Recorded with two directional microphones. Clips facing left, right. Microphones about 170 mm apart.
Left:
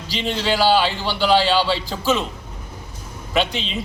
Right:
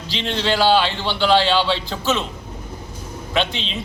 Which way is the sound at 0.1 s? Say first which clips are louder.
Even; 5° left (ahead or behind).